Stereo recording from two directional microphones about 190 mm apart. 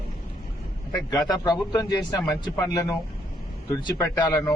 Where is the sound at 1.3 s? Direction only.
20° left (ahead or behind).